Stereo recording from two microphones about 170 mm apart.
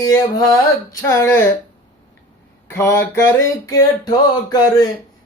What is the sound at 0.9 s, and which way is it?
Music, 20° left (ahead or behind).